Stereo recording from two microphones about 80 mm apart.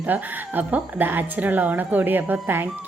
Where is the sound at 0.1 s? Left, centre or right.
Right.